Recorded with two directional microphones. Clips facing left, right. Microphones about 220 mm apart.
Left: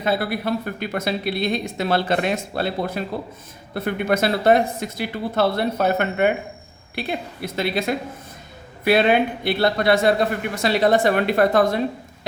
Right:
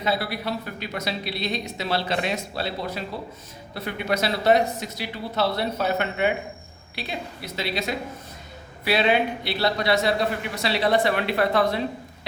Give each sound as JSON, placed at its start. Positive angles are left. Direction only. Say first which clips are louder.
{"t": 0.0, "sound": "speech", "louder": "left 4 dB", "side_deg": 50}